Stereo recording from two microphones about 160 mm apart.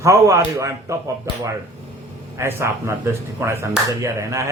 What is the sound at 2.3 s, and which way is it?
A man's voice, 15° right (ahead or behind).